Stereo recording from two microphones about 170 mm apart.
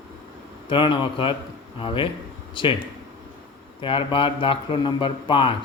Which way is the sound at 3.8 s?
30° left (ahead or behind).